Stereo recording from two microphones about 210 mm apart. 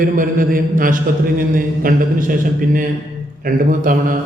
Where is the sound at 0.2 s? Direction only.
40° right (ahead or behind).